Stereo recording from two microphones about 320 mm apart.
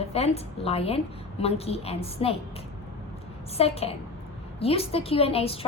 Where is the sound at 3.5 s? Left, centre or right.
Centre.